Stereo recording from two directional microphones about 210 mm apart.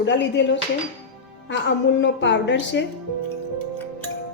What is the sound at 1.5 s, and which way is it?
Speech, 60° left (ahead or behind).